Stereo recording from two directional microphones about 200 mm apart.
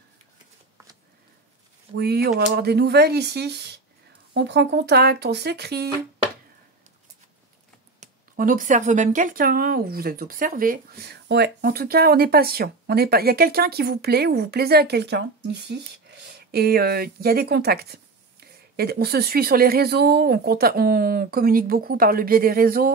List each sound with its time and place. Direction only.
2.0 s speech: 55° right (ahead or behind)
8.0 s speech: 40° right (ahead or behind)